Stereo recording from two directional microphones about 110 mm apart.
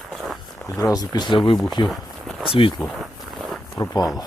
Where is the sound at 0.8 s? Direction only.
35° left (ahead or behind).